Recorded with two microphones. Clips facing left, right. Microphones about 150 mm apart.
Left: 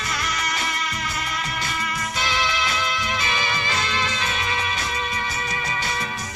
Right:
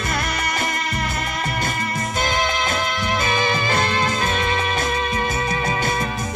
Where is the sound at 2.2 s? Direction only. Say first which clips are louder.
Right 3 dB; 50° right (ahead or behind).